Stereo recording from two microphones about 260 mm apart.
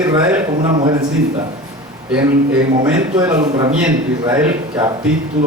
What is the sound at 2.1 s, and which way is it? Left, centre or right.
Speech, centre.